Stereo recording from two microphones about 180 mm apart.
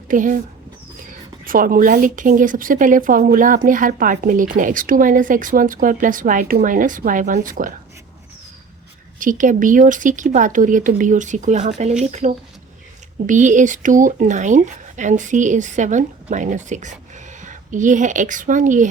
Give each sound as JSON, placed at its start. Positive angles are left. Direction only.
{"t": 0.1, "sound": "speech", "side_deg": -45}
{"t": 1.5, "sound": "speech", "side_deg": -50}
{"t": 9.1, "sound": "speech", "side_deg": -45}